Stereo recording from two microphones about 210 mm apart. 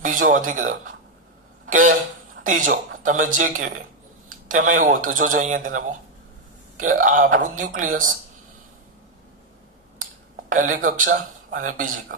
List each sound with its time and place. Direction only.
0.0 s speech: 40° right (ahead or behind)
1.6 s a sound: 40° right (ahead or behind)
2.4 s speech: 40° right (ahead or behind)
10.5 s speech: 40° right (ahead or behind)